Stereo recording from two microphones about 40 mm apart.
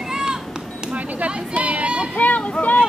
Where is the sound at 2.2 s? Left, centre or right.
Left.